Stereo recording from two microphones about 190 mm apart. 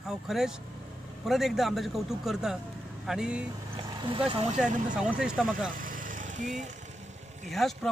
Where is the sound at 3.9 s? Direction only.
25° right (ahead or behind).